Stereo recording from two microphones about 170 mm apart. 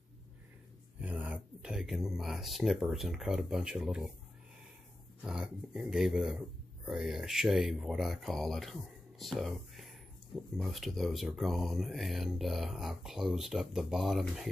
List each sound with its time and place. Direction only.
0.9 s speech: 10° right (ahead or behind)
5.2 s speech: 5° right (ahead or behind)